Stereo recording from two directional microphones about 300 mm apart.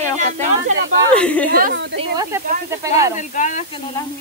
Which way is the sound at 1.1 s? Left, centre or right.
Centre.